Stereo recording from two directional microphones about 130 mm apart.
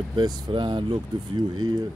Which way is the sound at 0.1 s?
35° right (ahead or behind).